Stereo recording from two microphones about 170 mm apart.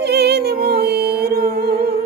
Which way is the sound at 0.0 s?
70° right (ahead or behind).